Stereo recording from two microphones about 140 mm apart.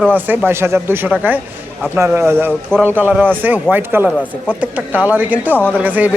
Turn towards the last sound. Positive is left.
turn(degrees=-10)  # may be behind; listen again after turning